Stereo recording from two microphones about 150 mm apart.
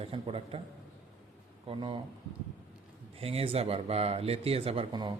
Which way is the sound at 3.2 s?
40° right (ahead or behind).